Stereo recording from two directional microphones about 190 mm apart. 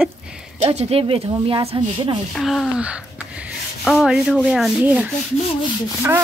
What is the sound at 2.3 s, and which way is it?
Sanding, centre (ahead or behind).